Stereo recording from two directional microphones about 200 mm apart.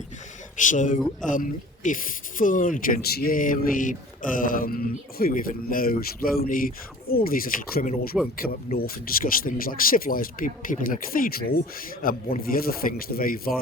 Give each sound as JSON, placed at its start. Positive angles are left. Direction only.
{"t": 0.6, "sound": "speech", "side_deg": 40}